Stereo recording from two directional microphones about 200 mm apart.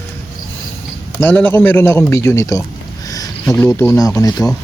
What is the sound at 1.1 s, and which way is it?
Speech, 10° left (ahead or behind).